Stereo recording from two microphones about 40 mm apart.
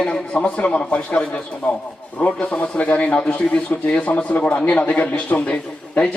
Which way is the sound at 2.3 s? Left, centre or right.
Left.